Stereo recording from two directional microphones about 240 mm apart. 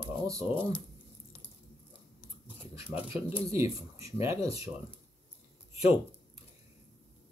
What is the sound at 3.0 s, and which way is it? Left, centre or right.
Speech, centre.